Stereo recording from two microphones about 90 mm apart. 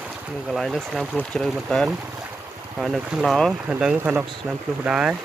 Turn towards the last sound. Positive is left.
turn(degrees=-10)  # may be behind; listen again after turning